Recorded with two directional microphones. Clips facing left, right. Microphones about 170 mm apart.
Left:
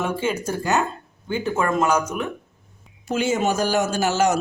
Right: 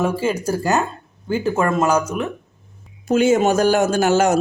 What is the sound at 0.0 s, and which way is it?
Speech, 30° right (ahead or behind).